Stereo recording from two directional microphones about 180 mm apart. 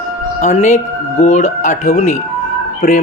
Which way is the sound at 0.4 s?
40° left (ahead or behind).